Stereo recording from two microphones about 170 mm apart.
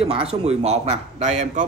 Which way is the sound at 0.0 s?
35° right (ahead or behind).